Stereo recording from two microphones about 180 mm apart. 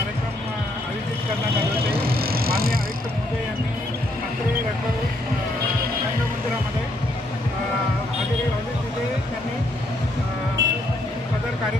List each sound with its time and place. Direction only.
2.2 s vehicle: 55° right (ahead or behind)
10.6 s music: 80° right